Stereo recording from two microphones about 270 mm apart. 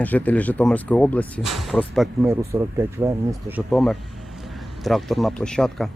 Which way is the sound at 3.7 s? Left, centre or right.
Centre.